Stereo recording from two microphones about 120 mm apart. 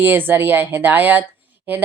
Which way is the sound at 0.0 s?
15° right (ahead or behind).